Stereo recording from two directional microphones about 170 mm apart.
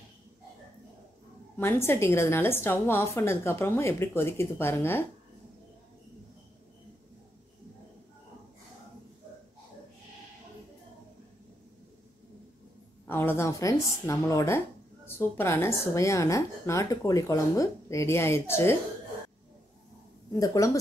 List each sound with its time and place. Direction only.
1.6 s speech: 15° left (ahead or behind)
13.0 s speech: 10° left (ahead or behind)
20.3 s speech: 20° left (ahead or behind)